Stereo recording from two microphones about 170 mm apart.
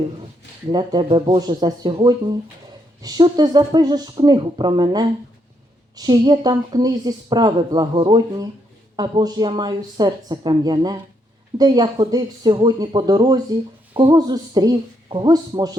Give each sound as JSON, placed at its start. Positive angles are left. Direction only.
{"t": 0.7, "sound": "speech", "side_deg": -25}